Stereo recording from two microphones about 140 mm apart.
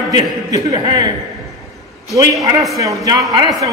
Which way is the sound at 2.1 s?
25° right (ahead or behind).